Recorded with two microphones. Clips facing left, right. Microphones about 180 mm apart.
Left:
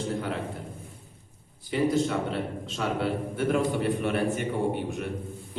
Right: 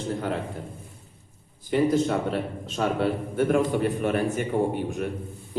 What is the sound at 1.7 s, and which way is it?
A man's voice, 50° right (ahead or behind).